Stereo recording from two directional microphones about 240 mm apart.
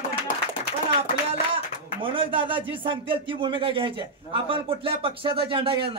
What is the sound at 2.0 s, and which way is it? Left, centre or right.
Speech, right.